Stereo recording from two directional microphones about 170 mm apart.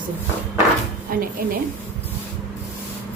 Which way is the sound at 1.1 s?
60° right (ahead or behind).